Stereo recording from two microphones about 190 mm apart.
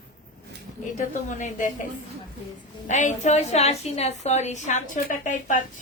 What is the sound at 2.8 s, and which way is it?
A woman's voice, 40° left (ahead or behind).